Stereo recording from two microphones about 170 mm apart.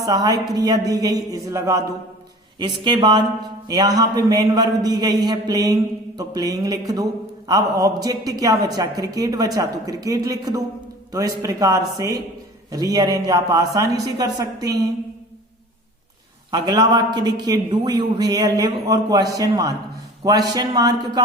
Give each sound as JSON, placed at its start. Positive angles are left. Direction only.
{"t": 0.0, "sound": "a man's voice", "side_deg": -25}
{"t": 16.5, "sound": "a man's voice", "side_deg": -25}